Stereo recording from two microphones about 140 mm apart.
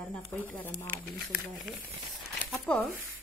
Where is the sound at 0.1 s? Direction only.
10° left (ahead or behind).